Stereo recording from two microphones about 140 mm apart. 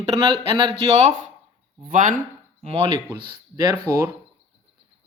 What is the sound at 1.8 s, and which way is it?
Speech, 70° right (ahead or behind).